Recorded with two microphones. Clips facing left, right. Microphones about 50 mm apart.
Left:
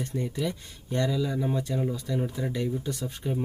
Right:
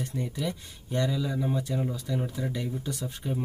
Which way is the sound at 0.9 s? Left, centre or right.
Centre.